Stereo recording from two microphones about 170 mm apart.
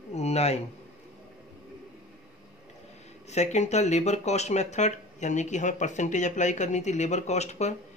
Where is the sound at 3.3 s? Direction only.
40° left (ahead or behind).